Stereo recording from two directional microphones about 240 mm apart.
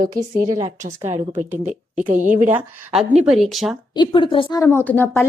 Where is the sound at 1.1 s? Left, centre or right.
Right.